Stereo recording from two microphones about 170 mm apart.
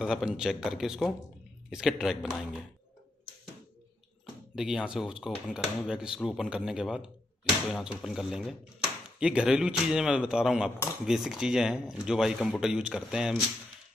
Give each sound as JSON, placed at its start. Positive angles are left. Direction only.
{"t": 0.0, "sound": "speech", "side_deg": -5}
{"t": 4.6, "sound": "speech", "side_deg": -5}